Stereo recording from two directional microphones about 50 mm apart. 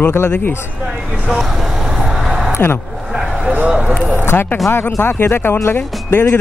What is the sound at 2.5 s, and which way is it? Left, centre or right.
Speech, left.